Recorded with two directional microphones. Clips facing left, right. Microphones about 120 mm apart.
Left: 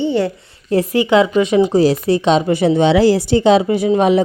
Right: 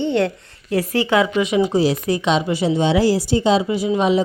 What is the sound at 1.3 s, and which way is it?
A woman's voice, 35° left (ahead or behind).